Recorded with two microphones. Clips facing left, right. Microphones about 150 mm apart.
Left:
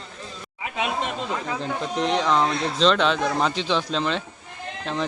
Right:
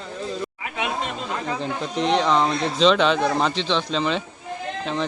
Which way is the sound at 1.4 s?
Centre (ahead or behind).